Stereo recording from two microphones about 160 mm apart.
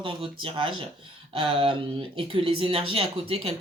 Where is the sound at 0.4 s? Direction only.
35° right (ahead or behind).